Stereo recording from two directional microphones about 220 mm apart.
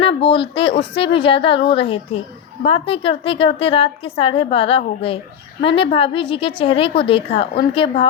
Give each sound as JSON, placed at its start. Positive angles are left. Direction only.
{"t": 0.0, "sound": "a woman's voice", "side_deg": 25}